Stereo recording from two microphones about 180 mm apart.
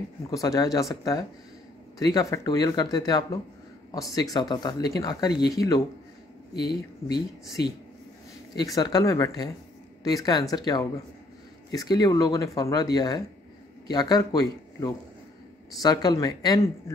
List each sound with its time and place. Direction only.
0.3 s speech: 20° left (ahead or behind)
8.5 s speech: 20° left (ahead or behind)